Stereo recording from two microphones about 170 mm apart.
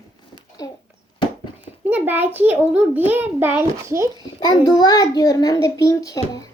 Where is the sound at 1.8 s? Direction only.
10° right (ahead or behind).